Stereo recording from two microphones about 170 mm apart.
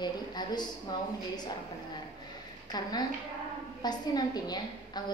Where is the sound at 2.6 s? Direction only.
25° left (ahead or behind).